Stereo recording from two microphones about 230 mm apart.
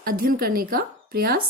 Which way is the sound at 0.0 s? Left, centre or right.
Right.